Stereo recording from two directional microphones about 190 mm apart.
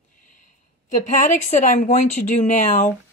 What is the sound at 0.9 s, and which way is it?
Speech, 40° left (ahead or behind).